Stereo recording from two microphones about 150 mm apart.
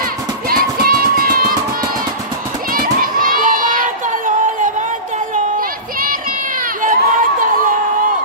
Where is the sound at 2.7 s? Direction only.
70° right (ahead or behind).